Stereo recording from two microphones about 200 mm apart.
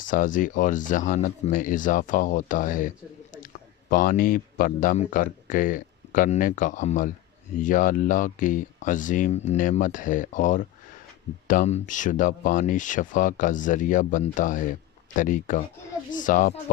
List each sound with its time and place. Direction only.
0.0 s speech: 40° left (ahead or behind)